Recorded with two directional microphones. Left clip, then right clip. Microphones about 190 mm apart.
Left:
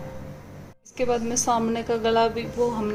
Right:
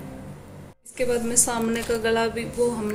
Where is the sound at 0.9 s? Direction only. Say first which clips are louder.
Even; 40° left (ahead or behind).